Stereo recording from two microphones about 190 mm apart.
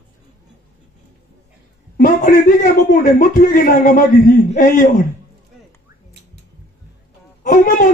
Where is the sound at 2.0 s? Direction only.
45° left (ahead or behind).